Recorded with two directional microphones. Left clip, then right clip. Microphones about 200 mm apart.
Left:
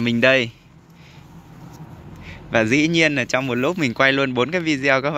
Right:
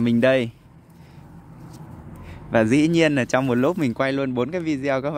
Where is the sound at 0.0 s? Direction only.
10° right (ahead or behind).